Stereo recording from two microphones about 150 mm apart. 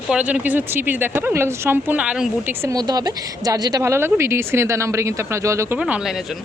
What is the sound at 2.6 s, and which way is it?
A woman's voice, 25° right (ahead or behind).